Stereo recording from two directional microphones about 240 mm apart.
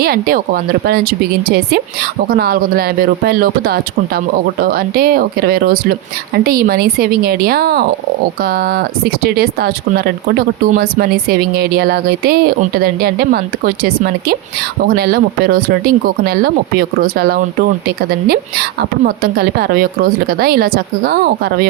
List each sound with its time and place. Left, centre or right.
0.0 s speech: right